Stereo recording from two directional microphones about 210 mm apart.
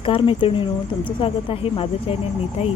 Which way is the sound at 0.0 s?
25° left (ahead or behind).